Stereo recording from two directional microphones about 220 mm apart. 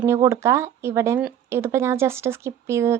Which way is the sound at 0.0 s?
10° right (ahead or behind).